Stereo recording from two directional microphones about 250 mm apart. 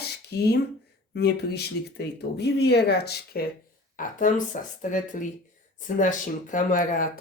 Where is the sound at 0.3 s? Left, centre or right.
Left.